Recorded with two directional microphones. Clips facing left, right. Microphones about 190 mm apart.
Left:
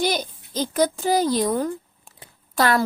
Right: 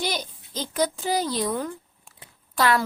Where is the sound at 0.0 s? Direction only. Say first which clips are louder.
Left 6 dB; 45° left (ahead or behind).